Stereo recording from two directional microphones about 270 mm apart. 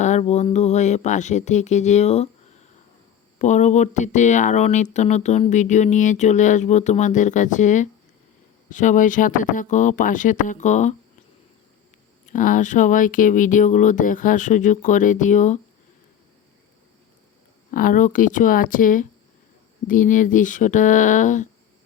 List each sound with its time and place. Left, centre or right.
0.0 s speech: left
12.2 s speech: left
17.7 s speech: left